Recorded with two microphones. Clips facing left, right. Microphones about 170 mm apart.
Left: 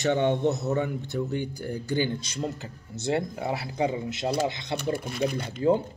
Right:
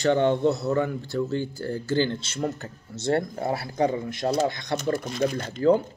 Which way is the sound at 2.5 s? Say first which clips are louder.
Right 1 dB; 55° right (ahead or behind).